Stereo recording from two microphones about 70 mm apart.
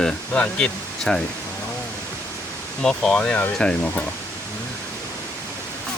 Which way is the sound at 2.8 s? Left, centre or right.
Centre.